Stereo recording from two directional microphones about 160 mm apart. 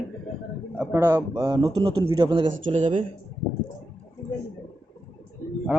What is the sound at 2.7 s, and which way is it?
Speech, 50° right (ahead or behind).